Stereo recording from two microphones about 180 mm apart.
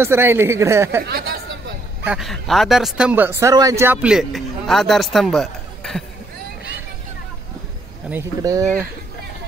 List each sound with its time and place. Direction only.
0.0 s speech: 15° right (ahead or behind)
1.0 s speech: 60° right (ahead or behind)
2.0 s speech: centre (ahead or behind)
8.1 s speech: 15° right (ahead or behind)